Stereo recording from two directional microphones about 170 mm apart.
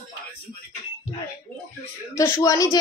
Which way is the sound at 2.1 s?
15° left (ahead or behind).